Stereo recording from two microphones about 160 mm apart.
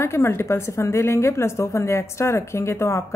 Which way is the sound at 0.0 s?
15° left (ahead or behind).